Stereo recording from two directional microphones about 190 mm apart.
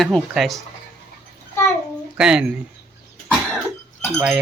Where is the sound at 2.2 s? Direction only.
5° right (ahead or behind).